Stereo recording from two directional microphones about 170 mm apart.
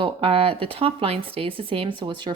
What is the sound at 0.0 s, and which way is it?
Speech, 30° right (ahead or behind).